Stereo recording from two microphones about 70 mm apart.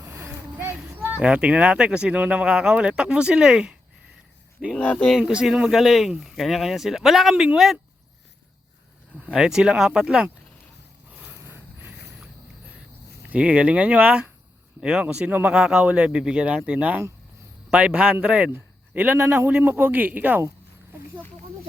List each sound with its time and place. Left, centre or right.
0.0 s a sound: right
1.2 s speech: centre
4.8 s speech: left
5.2 s speech: centre
9.1 s speech: centre
11.3 s a sound: right
13.2 s speech: right
18.9 s speech: right